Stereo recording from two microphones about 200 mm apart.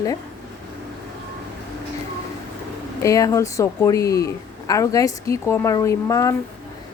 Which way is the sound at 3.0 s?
15° left (ahead or behind).